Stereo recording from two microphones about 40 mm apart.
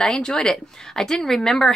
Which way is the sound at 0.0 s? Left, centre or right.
Centre.